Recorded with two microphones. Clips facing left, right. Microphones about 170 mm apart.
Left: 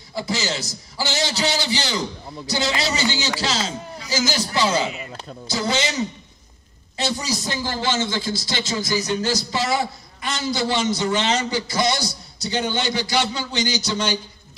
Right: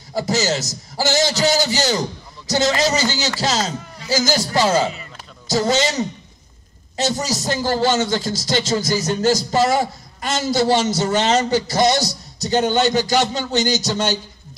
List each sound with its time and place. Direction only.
0.1 s a man's voice: 40° right (ahead or behind)